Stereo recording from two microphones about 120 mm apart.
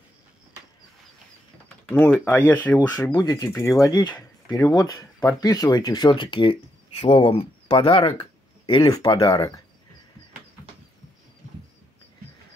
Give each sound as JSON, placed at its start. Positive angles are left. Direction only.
{"t": 1.9, "sound": "speech", "side_deg": 20}
{"t": 2.9, "sound": "speech", "side_deg": 35}
{"t": 3.8, "sound": "speech", "side_deg": 35}
{"t": 8.8, "sound": "speech", "side_deg": 30}